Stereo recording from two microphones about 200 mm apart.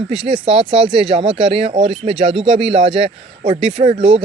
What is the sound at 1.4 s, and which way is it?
Speech, 25° right (ahead or behind).